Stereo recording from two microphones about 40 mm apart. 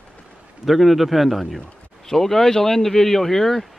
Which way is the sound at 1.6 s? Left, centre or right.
Centre.